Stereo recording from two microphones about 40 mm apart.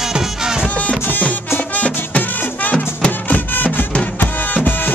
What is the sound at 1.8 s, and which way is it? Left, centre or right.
Music, left.